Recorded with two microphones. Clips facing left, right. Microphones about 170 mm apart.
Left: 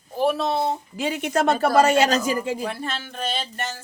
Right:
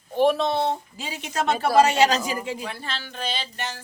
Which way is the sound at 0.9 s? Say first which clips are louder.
Left 6 dB; 55° left (ahead or behind).